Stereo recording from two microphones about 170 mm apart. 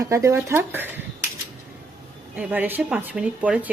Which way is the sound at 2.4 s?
10° right (ahead or behind).